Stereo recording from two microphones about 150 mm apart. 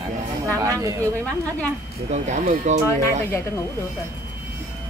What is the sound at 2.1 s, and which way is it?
Speech, 50° right (ahead or behind).